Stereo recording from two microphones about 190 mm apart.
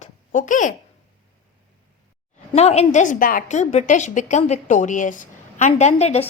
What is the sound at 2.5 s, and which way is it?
A woman's voice, 35° left (ahead or behind).